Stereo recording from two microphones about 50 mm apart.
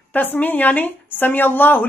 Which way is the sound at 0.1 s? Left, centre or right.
Left.